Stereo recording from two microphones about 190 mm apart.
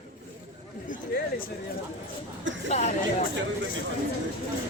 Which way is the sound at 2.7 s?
40° left (ahead or behind).